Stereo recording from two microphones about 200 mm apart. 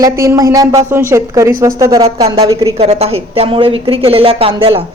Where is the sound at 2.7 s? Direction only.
30° right (ahead or behind).